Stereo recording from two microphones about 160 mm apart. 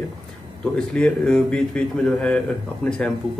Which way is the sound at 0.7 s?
5° left (ahead or behind).